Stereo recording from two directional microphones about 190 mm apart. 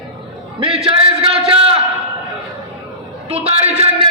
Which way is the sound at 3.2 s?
30° right (ahead or behind).